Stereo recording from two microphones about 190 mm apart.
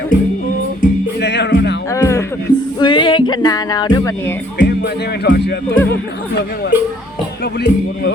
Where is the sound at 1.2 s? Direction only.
60° left (ahead or behind).